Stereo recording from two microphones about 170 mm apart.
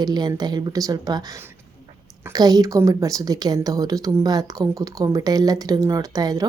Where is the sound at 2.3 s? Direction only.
20° right (ahead or behind).